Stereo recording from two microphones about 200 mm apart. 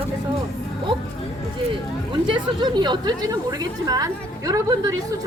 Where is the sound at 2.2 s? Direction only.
25° right (ahead or behind).